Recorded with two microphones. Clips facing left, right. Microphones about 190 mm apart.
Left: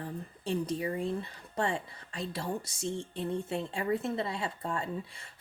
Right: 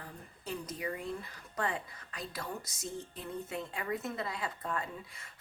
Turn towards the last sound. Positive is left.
turn(degrees=30)  # may be behind; listen again after turning